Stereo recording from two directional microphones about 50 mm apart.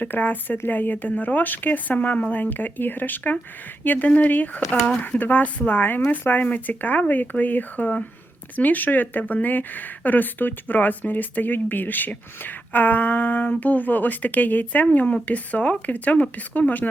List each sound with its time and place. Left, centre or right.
0.0 s speech: left